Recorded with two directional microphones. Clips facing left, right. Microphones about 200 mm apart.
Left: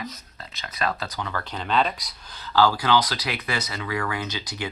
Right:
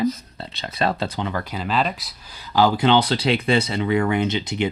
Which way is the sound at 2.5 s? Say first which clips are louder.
Right 3 dB; 20° right (ahead or behind).